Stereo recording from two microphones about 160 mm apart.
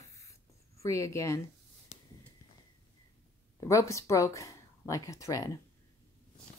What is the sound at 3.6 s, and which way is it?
Speech, 20° left (ahead or behind).